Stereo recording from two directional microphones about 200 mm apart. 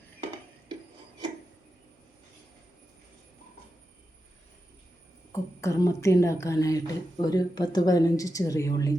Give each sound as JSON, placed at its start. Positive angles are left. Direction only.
{"t": 5.3, "sound": "a woman's voice", "side_deg": 15}